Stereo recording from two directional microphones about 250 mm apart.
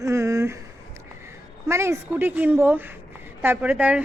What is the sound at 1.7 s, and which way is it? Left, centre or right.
A woman's voice, centre.